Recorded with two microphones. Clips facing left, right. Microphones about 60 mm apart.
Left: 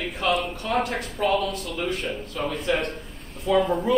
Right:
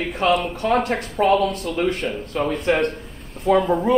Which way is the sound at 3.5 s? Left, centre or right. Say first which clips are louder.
Right 4 dB; right.